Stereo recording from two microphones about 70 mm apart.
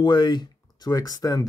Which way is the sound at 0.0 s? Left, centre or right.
Left.